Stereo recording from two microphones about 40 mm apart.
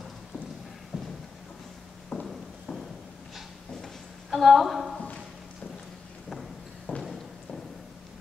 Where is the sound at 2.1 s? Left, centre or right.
Left.